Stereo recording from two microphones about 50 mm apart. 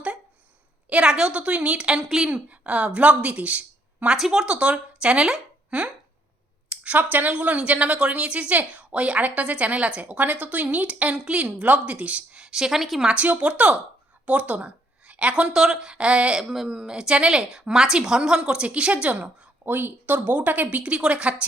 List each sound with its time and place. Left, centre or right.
0.9 s a woman's voice: right
4.4 s a woman's voice: right
5.3 s a sound: centre
6.7 s a woman's voice: right; by 13.1 s centre
13.3 s a woman's voice: right
15.5 s speech: centre
16.0 s a woman's voice: right
16.4 s speech: centre; by 18.9 s right
19.2 s a woman's voice: right